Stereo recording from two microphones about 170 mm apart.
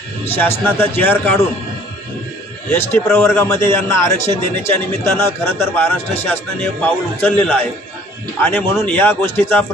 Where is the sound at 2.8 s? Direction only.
10° left (ahead or behind).